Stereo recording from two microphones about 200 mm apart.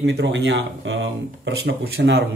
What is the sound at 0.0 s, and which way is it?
Speech, 60° right (ahead or behind).